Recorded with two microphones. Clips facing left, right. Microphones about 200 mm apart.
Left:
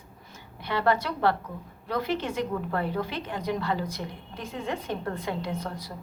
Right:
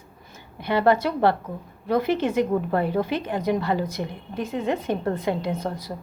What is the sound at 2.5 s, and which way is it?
Speech, 25° right (ahead or behind).